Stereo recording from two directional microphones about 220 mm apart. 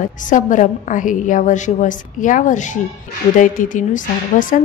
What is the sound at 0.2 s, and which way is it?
A woman's voice, 35° left (ahead or behind).